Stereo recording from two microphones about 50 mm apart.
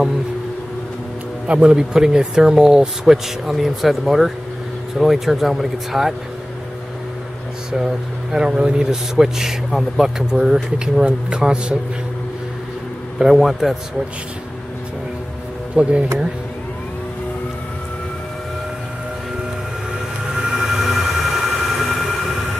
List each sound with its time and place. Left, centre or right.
1.5 s speech: centre
7.7 s speech: centre
13.2 s speech: centre
15.7 s speech: right
20.2 s train: centre